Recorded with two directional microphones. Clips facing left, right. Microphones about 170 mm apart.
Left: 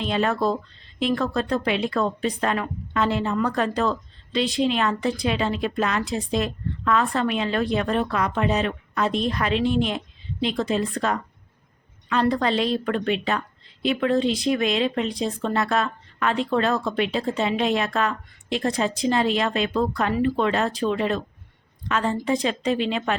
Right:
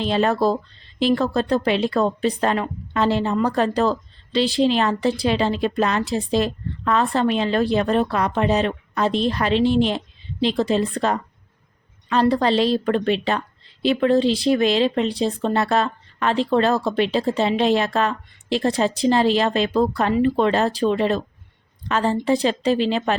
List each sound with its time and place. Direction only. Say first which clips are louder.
0.0 s speech: right 4 dB; 35° right (ahead or behind)